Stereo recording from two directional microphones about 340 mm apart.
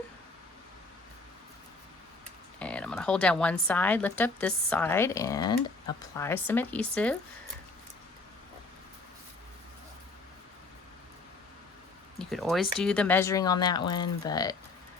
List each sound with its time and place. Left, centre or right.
2.6 s speech: centre
12.2 s a sound: centre
12.8 s speech: centre